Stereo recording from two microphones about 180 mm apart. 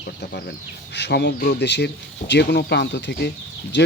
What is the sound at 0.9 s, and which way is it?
Speech, 70° left (ahead or behind).